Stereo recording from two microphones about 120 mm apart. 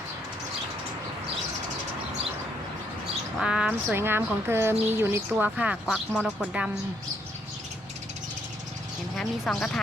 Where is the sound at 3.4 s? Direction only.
10° right (ahead or behind).